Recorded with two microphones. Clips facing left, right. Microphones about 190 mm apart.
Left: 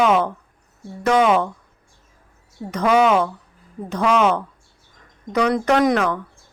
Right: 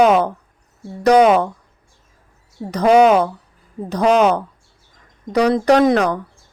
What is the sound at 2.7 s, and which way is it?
Speech, 35° right (ahead or behind).